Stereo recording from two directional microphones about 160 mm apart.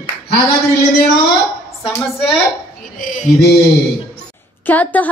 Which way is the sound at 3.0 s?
55° left (ahead or behind).